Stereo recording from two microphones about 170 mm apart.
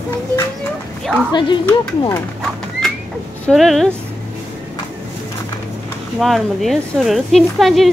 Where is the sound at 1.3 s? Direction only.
25° left (ahead or behind).